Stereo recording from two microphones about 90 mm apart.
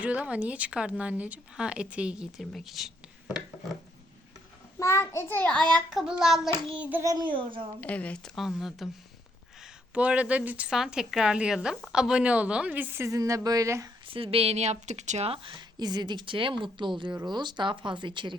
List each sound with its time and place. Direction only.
0.0 s speech: 15° right (ahead or behind)
2.4 s speech: centre (ahead or behind)
4.8 s a child's voice: 30° left (ahead or behind)
5.5 s speech: 10° left (ahead or behind)
5.9 s speech: 5° right (ahead or behind)
7.0 s speech: 40° right (ahead or behind)
7.3 s speech: 65° right (ahead or behind)
7.8 s speech: 15° left (ahead or behind)
8.2 s speech: centre (ahead or behind)
9.9 s speech: 15° right (ahead or behind)
13.1 s speech: 35° right (ahead or behind)
14.1 s a woman's voice: 90° right
15.5 s speech: 50° right (ahead or behind)